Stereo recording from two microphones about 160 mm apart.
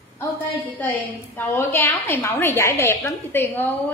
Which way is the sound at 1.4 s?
15° left (ahead or behind).